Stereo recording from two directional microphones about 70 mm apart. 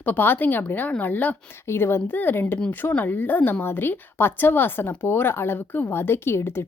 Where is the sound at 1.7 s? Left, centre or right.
Left.